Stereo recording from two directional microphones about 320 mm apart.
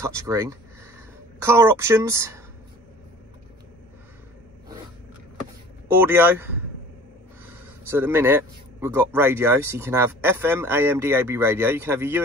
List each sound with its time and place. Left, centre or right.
0.0 s speech: centre
5.9 s speech: centre